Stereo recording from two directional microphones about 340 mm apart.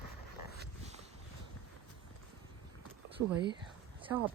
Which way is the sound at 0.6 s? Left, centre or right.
Centre.